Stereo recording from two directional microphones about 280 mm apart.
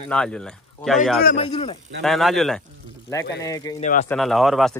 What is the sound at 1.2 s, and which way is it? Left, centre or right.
Speech, centre.